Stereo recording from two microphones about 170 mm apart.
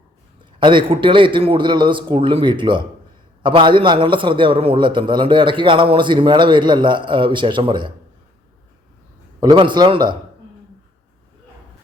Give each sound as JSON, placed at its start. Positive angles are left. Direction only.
{"t": 0.6, "sound": "a man's voice", "side_deg": -30}
{"t": 9.4, "sound": "a man's voice", "side_deg": -25}